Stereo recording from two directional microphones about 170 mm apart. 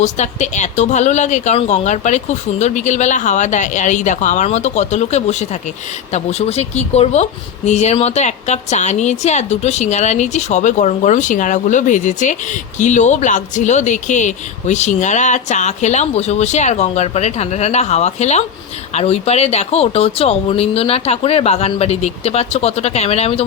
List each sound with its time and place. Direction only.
0.0 s speech: 45° left (ahead or behind)